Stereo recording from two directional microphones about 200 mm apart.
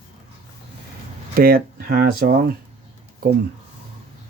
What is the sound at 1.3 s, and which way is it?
Speech, 45° right (ahead or behind).